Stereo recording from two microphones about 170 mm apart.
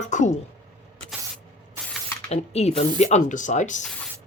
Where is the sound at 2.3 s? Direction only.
40° left (ahead or behind).